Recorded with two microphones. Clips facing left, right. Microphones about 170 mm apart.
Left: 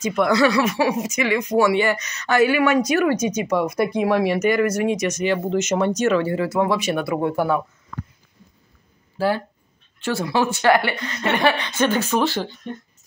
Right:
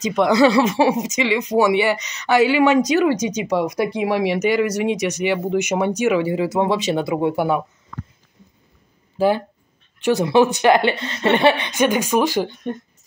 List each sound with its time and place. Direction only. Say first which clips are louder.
0.0 s speech: right 3 dB; 20° right (ahead or behind)
9.2 s speech: right 4 dB; 20° right (ahead or behind)
12.7 s speech: right 5 dB; 55° right (ahead or behind)